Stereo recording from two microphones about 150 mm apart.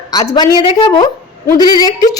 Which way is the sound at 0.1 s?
25° left (ahead or behind).